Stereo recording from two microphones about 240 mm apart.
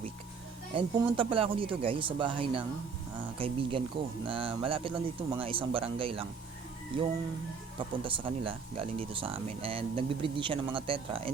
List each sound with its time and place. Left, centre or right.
0.7 s speech: right
7.8 s speech: right